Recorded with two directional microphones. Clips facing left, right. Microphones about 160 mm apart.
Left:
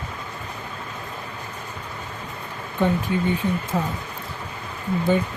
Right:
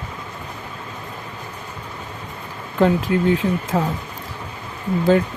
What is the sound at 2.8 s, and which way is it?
Speech, 90° right.